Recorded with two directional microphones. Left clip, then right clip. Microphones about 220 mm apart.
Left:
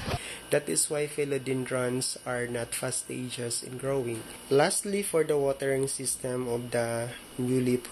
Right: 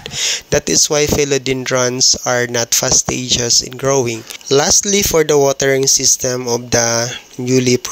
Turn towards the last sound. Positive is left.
turn(degrees=-40)  # may be behind; listen again after turning